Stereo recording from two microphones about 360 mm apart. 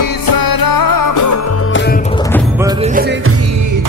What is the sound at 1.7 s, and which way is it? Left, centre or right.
Music, left.